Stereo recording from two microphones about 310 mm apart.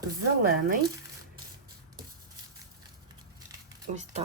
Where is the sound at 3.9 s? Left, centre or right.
Right.